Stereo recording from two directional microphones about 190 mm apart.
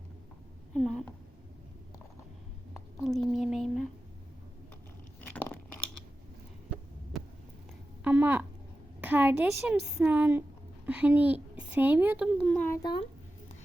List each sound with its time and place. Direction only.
0.7 s speech: centre (ahead or behind)
3.0 s speech: centre (ahead or behind)
7.1 s heart sounds: centre (ahead or behind)
8.0 s a woman's voice: 10° right (ahead or behind)
12.5 s speech: 15° left (ahead or behind)